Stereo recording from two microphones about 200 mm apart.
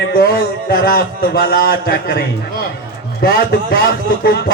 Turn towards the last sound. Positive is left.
turn(degrees=50)  # may be behind; listen again after turning